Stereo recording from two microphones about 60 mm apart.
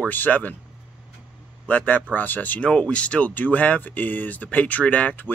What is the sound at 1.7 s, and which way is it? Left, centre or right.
Speech, left.